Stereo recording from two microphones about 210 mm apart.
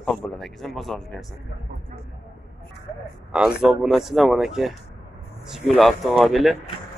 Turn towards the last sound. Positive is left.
turn(degrees=0)  # may be behind; listen again after turning